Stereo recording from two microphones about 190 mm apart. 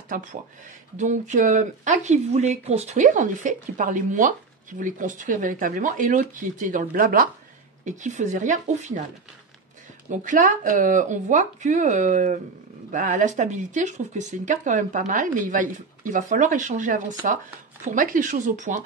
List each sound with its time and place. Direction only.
0.1 s speech: 45° right (ahead or behind)
10.0 s speech: 40° right (ahead or behind)